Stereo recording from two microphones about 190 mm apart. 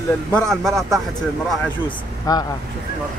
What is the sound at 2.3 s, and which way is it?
Speech, 20° left (ahead or behind).